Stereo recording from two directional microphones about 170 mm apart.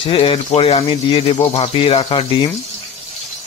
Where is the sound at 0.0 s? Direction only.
30° left (ahead or behind).